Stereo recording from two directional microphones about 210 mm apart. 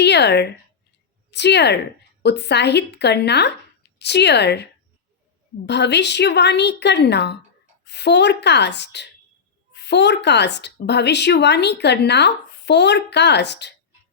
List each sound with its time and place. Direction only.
0.0 s a woman's voice: 55° left (ahead or behind)